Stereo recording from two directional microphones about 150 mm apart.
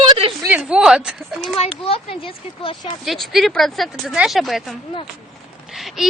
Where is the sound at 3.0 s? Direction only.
Centre (ahead or behind).